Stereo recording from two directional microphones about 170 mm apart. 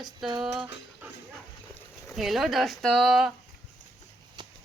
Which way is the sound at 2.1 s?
Centre (ahead or behind).